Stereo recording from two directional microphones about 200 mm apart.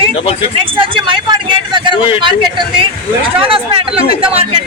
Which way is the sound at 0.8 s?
25° right (ahead or behind).